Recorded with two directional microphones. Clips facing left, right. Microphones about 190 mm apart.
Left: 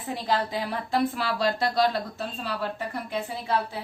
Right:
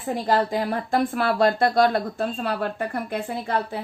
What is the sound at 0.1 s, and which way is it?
Speech, 45° right (ahead or behind).